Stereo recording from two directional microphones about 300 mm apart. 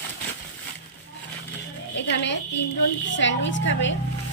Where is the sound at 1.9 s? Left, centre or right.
Left.